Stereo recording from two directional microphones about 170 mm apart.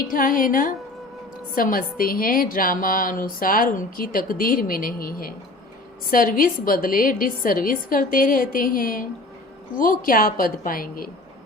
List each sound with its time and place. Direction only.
0.0 s a woman's voice: 55° left (ahead or behind)